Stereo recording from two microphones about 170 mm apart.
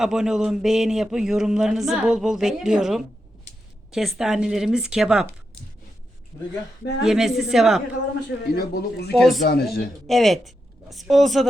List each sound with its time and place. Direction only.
0.0 s speech: 5° right (ahead or behind)
7.0 s speech: 5° right (ahead or behind)
8.5 s speech: 70° left (ahead or behind)
9.1 s speech: centre (ahead or behind)
9.5 s speech: 65° left (ahead or behind)
10.1 s a woman's voice: centre (ahead or behind)